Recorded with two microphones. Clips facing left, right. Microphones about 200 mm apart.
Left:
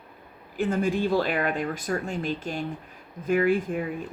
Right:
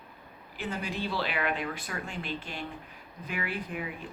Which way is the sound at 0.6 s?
50° left (ahead or behind).